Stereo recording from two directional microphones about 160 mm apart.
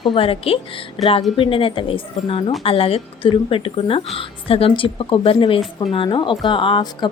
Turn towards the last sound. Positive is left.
turn(degrees=30)  # may be behind; listen again after turning